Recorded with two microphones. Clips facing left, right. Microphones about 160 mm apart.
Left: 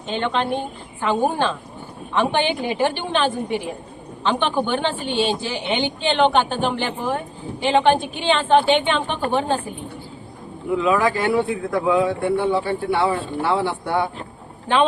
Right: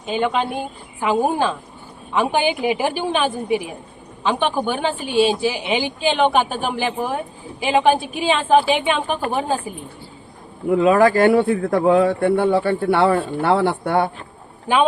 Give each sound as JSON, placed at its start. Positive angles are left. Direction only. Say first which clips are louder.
{"t": 0.0, "sound": "a man's voice", "louder": "right 2 dB", "side_deg": -5}
{"t": 10.7, "sound": "speech", "louder": "right 5 dB", "side_deg": -50}